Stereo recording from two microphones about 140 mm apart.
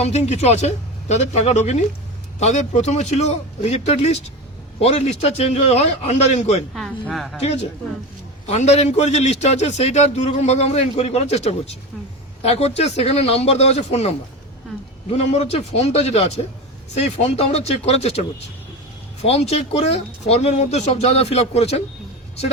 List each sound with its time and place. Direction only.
0.0 s a man's voice: 50° left (ahead or behind)
6.7 s speech: centre (ahead or behind)
7.4 s a man's voice: 50° left (ahead or behind)
15.1 s a man's voice: 50° left (ahead or behind)